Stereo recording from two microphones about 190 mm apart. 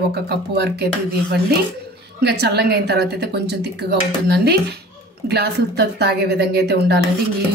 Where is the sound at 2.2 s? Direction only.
60° right (ahead or behind).